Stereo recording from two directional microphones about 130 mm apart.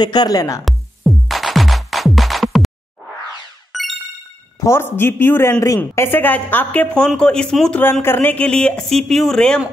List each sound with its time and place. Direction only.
0.0 s speech: 35° left (ahead or behind)
0.7 s music: centre (ahead or behind)
3.7 s music: centre (ahead or behind)
4.6 s a woman's voice: 20° left (ahead or behind); by 7.8 s 5° left (ahead or behind)
8.0 s speech: 15° left (ahead or behind)